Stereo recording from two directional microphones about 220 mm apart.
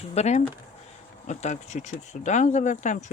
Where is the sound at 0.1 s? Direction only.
30° left (ahead or behind).